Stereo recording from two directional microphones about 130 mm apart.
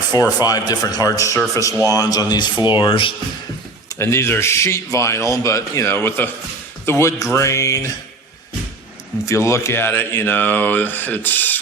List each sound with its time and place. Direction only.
0.1 s speech: 30° left (ahead or behind)
3.8 s speech: 20° left (ahead or behind)
9.2 s speech: 25° left (ahead or behind)